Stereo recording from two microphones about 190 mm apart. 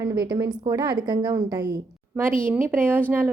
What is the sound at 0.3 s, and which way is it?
A woman's voice, 20° right (ahead or behind).